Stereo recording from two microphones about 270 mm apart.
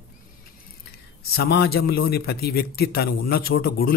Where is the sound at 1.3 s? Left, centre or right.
Left.